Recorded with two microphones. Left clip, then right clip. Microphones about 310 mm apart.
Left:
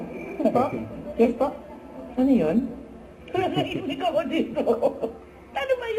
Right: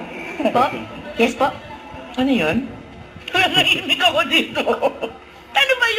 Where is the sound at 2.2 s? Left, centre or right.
Centre.